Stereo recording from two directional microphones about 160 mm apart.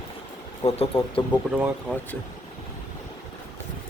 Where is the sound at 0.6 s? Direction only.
35° left (ahead or behind).